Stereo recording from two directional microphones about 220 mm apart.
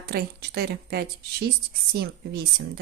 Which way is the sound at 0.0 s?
45° right (ahead or behind).